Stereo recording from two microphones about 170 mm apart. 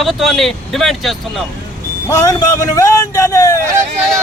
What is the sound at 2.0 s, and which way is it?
A man's voice, 20° left (ahead or behind).